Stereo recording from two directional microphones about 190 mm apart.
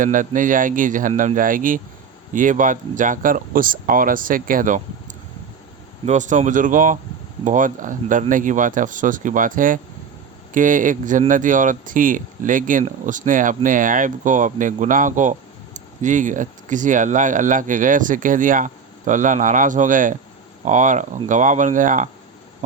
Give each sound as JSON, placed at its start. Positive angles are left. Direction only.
{"t": 0.0, "sound": "speech", "side_deg": -45}
{"t": 6.1, "sound": "speech", "side_deg": -40}